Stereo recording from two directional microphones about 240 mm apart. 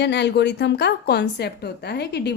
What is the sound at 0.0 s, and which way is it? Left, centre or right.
A woman's voice, left.